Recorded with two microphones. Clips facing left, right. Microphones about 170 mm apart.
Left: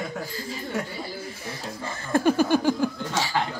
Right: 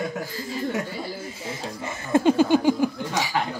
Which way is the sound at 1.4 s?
20° right (ahead or behind).